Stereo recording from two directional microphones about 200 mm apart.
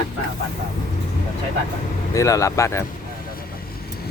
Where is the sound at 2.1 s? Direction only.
15° left (ahead or behind).